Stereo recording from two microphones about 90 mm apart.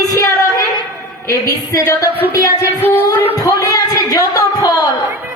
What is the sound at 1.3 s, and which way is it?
Speech, 40° left (ahead or behind).